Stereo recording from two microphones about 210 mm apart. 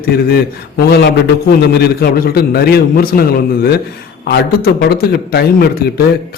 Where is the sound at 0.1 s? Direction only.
50° left (ahead or behind).